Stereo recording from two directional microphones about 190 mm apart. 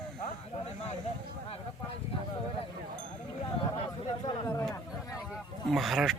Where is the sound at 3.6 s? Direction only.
25° left (ahead or behind).